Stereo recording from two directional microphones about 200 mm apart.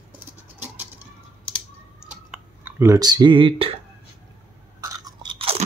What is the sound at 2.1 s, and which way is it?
Clicking, 10° right (ahead or behind).